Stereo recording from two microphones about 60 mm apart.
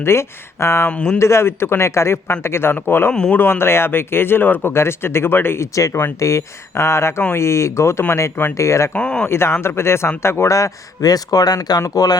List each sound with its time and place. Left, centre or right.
0.0 s speech: left
0.9 s speech: centre
1.2 s speech: left
3.1 s speech: centre
3.3 s speech: left
5.7 s speech: left
9.0 s speech: centre
9.2 s speech: left